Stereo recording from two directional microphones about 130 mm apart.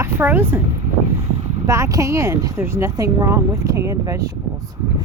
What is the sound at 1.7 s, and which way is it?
Speech, 25° right (ahead or behind).